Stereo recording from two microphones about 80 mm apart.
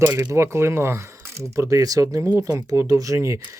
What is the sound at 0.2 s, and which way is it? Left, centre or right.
Speech, right.